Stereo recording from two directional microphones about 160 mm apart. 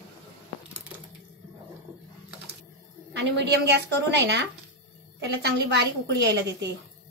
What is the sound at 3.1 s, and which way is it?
A woman's voice, 90° right.